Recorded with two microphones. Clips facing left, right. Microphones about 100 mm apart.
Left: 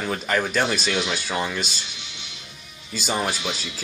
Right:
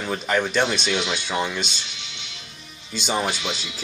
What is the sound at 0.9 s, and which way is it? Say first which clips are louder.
Speech: even; 20° right (ahead or behind).